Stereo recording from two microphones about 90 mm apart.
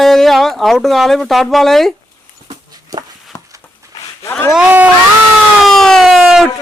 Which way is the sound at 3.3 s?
30° left (ahead or behind).